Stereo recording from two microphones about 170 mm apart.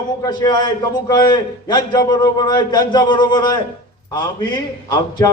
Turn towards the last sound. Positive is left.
turn(degrees=25)  # may be behind; listen again after turning